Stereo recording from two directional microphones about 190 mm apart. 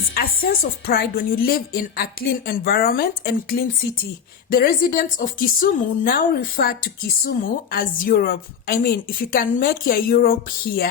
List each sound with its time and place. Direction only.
0.1 s a woman's voice: 50° left (ahead or behind)
4.4 s a woman's voice: 50° left (ahead or behind)